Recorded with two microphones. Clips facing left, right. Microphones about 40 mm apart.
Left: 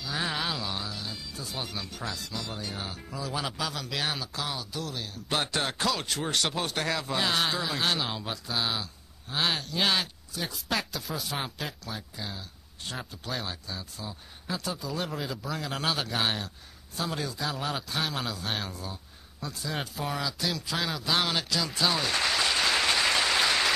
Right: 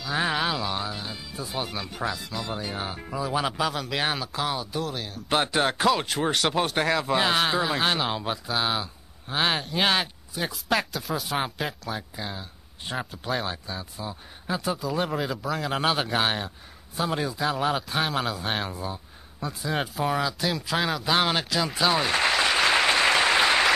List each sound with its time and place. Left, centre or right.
0.1 s a sound: right
0.4 s a sound: centre
0.7 s speech: right
10.9 s speech: centre
15.4 s speech: centre
15.7 s speech: right
21.5 s applause: centre